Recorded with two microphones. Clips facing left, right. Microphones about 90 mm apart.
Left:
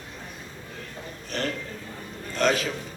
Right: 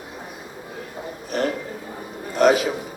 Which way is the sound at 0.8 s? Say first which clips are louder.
Right 7 dB; 15° right (ahead or behind).